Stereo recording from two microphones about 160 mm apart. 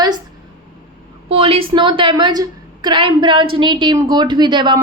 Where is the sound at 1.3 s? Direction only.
35° right (ahead or behind).